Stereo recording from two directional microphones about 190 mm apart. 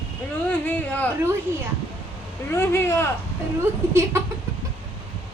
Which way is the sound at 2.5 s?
15° left (ahead or behind).